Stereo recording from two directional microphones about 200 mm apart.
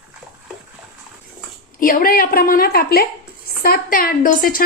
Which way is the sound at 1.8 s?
45° left (ahead or behind).